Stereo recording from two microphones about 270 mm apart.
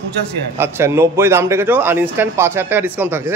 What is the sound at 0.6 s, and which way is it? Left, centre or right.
Speech, centre.